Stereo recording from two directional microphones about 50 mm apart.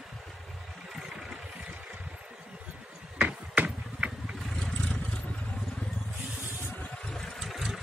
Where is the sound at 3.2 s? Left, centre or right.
Right.